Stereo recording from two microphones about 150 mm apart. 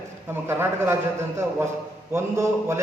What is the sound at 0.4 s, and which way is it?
Speech, 15° right (ahead or behind).